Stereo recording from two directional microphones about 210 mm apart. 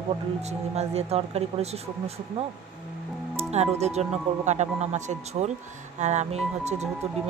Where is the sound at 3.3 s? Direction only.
30° right (ahead or behind).